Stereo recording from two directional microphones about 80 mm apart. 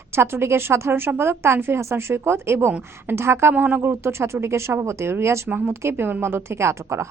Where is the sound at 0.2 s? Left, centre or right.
Right.